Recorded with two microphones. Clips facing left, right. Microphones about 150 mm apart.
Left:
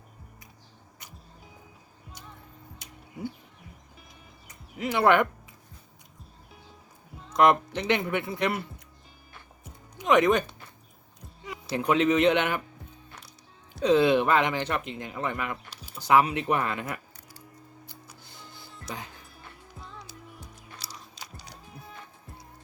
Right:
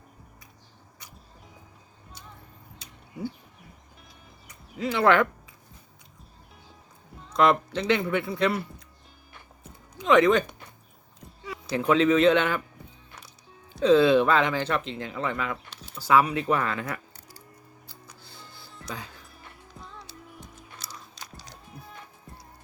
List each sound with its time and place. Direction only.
4.4 s a sound: 20° left (ahead or behind)
7.4 s speech: 15° left (ahead or behind)
10.0 s speech: 15° left (ahead or behind)
11.7 s speech: 15° left (ahead or behind)
13.8 s speech: 15° left (ahead or behind)
18.1 s printer: 15° left (ahead or behind)
19.8 s music: centre (ahead or behind)
21.2 s music: 10° left (ahead or behind)
21.7 s music: centre (ahead or behind)